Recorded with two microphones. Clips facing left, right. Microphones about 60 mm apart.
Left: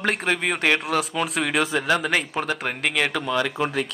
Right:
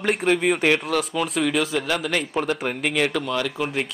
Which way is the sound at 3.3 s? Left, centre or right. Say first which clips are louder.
Left 2 dB; centre.